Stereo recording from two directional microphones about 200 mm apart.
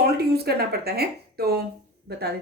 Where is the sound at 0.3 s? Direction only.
50° right (ahead or behind).